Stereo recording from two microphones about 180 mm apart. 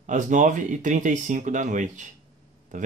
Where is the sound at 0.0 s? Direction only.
45° right (ahead or behind).